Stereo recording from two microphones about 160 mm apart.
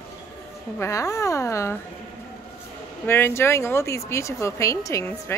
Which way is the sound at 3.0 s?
15° left (ahead or behind).